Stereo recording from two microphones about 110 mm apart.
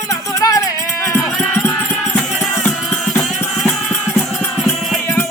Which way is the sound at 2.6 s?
10° left (ahead or behind).